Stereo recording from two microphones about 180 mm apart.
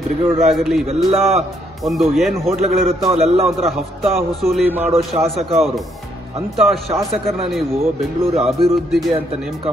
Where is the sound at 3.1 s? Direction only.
35° right (ahead or behind).